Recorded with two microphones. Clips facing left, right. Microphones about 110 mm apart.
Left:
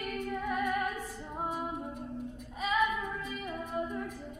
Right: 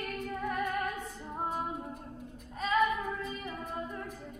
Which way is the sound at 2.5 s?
5° left (ahead or behind).